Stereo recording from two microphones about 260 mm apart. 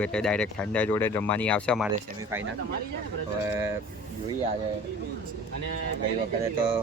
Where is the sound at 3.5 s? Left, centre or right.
Centre.